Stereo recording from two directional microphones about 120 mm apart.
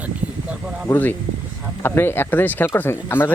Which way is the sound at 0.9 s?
15° left (ahead or behind).